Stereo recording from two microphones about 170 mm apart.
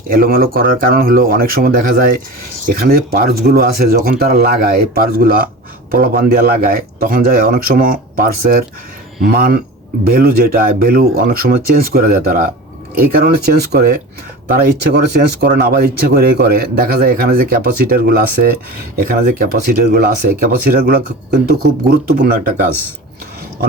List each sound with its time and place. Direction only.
0.1 s speech: 60° right (ahead or behind)